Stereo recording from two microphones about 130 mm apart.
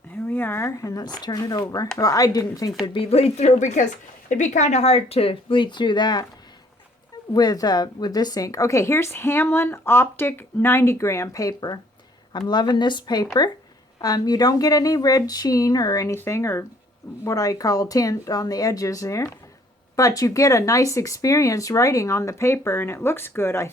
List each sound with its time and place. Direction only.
0.3 s speech: 15° left (ahead or behind)
2.8 s speech: 45° left (ahead or behind)
7.3 s speech: 30° left (ahead or behind)